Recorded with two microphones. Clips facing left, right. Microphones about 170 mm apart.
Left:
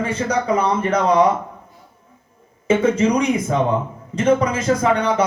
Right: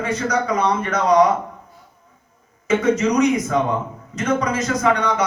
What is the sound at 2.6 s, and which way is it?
A man's voice, 30° left (ahead or behind).